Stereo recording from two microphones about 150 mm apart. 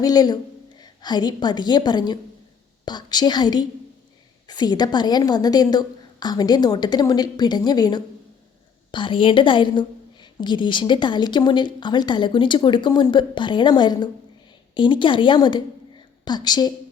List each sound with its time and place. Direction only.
0.0 s a woman's voice: 25° left (ahead or behind)